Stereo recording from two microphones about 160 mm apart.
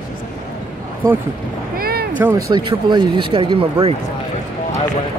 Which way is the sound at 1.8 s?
70° right (ahead or behind).